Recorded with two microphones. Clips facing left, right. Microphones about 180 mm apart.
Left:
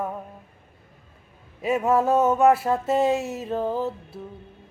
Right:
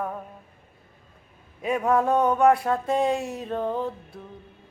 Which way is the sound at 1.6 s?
5° left (ahead or behind).